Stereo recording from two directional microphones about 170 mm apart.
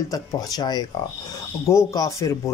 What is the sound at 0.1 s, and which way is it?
A man's voice, 20° left (ahead or behind).